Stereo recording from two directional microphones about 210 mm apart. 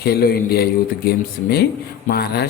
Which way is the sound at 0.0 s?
50° left (ahead or behind).